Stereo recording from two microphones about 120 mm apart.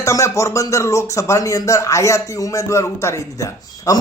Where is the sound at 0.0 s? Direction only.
25° left (ahead or behind).